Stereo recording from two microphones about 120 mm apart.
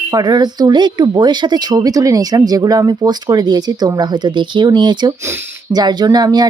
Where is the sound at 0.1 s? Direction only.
35° right (ahead or behind).